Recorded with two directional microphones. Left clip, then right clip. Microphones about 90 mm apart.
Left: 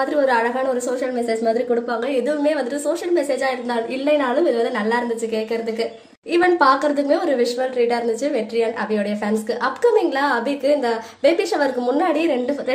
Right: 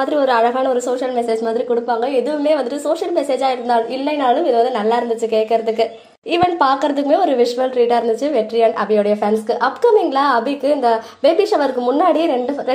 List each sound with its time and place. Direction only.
0.3 s a woman's voice: 30° right (ahead or behind)
3.3 s a woman's voice: 20° right (ahead or behind)